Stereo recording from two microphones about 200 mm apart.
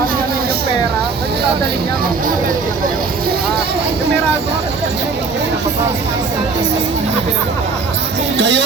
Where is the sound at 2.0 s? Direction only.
45° right (ahead or behind).